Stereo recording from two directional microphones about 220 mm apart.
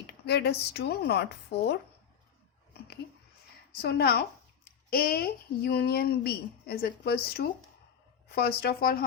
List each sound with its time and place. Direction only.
0.1 s speech: 50° left (ahead or behind)
3.7 s speech: 45° left (ahead or behind)